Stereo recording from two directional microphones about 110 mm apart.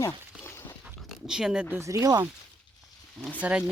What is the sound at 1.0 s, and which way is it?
Speech, 5° right (ahead or behind).